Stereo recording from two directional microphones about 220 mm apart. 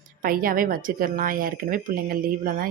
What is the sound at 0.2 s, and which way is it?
A woman's voice, 40° right (ahead or behind).